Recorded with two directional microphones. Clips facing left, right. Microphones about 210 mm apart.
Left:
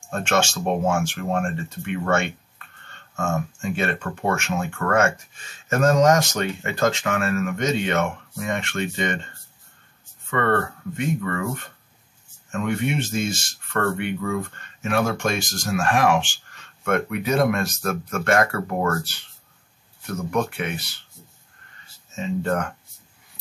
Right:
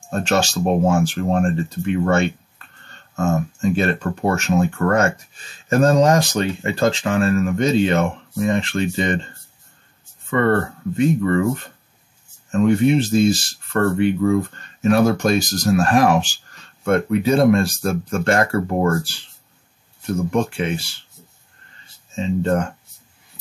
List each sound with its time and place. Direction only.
0.1 s speech: 35° right (ahead or behind)
11.0 s speech: 30° right (ahead or behind)
22.1 s speech: 30° right (ahead or behind)